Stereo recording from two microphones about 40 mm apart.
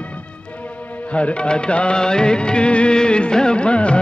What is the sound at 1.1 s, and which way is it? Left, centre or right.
Music, left.